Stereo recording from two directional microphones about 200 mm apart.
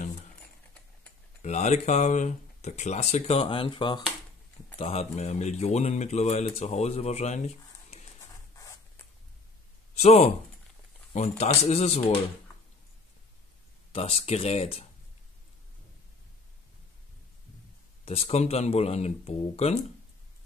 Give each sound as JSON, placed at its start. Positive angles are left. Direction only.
{"t": 1.4, "sound": "speech", "side_deg": 35}
{"t": 8.5, "sound": "zipper", "side_deg": 15}
{"t": 9.9, "sound": "speech", "side_deg": 35}
{"t": 13.9, "sound": "speech", "side_deg": 30}
{"t": 18.0, "sound": "speech", "side_deg": 30}